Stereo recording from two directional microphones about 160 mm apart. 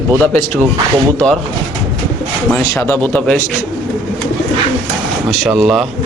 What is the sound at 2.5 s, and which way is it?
Speech, 10° left (ahead or behind).